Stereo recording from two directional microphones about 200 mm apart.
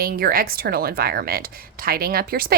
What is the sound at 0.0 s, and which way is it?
A woman's voice, 45° right (ahead or behind).